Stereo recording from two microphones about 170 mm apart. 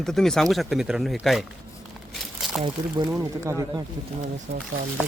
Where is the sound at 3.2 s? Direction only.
15° right (ahead or behind).